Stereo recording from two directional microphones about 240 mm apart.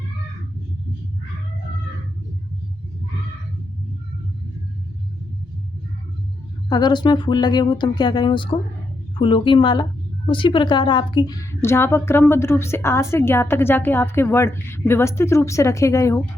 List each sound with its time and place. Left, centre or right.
6.7 s a woman's voice: centre